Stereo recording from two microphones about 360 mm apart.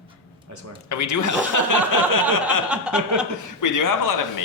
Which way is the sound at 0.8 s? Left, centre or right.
Left.